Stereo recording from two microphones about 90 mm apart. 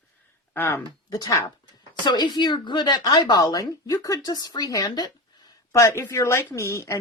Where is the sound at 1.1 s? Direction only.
45° left (ahead or behind).